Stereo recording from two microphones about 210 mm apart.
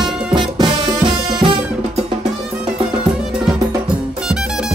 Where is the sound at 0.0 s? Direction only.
20° right (ahead or behind).